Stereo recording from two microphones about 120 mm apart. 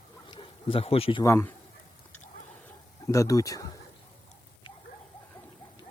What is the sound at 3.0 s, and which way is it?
Speech, 25° left (ahead or behind).